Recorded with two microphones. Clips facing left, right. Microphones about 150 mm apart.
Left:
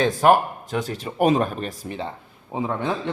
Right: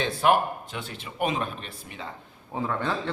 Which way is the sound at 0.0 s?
45° left (ahead or behind).